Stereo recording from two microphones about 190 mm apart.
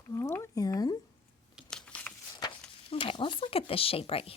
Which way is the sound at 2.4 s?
30° left (ahead or behind).